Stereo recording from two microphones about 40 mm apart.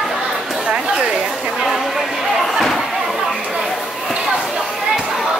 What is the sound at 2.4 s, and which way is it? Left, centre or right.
Slam, centre.